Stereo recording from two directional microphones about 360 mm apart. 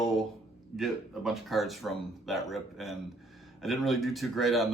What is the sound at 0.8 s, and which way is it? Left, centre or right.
A man's voice, centre.